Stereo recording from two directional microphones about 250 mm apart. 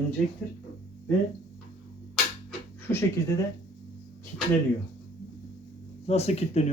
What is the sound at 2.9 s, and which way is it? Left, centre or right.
Speech, centre.